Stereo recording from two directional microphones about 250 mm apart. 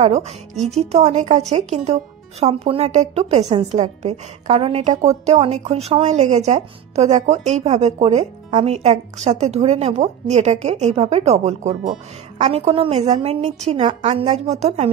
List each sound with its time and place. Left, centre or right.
0.0 s a woman's voice: right